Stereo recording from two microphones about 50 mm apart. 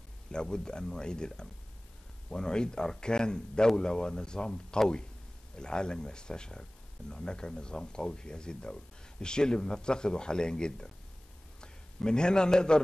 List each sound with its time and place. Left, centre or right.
0.3 s a man's voice: centre